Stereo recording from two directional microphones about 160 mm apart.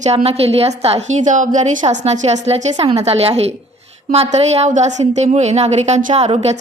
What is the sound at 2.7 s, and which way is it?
A woman's voice, 30° right (ahead or behind).